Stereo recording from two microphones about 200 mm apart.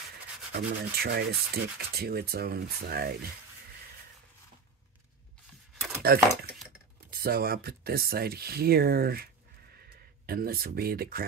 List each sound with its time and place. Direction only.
0.5 s rub: 50° right (ahead or behind)
6.0 s speech: 50° right (ahead or behind)
7.1 s rub: 50° right (ahead or behind)